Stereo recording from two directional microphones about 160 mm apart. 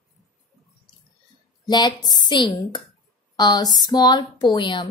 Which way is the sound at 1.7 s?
25° left (ahead or behind).